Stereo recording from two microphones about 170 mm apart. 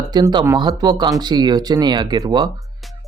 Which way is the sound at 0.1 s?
25° right (ahead or behind).